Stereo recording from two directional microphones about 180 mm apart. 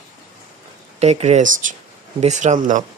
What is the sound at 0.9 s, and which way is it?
Speech, 35° right (ahead or behind).